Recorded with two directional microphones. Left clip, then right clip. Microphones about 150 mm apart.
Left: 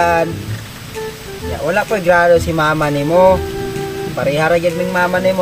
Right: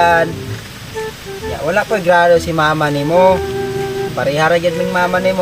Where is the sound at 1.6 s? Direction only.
5° left (ahead or behind).